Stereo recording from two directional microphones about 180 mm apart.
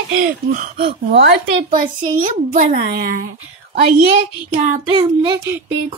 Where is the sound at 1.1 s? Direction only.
75° right (ahead or behind).